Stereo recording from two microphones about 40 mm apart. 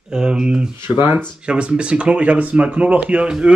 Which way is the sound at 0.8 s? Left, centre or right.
Right.